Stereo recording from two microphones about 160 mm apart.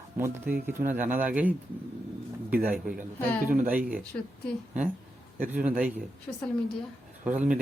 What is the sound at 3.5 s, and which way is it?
Speech, 60° right (ahead or behind).